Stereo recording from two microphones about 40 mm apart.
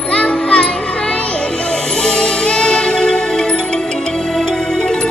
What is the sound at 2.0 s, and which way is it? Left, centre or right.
Music, centre.